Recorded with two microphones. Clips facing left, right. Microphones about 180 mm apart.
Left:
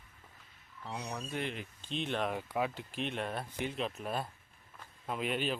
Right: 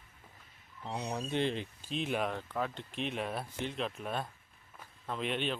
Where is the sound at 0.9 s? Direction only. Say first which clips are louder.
Right 5 dB; 20° right (ahead or behind).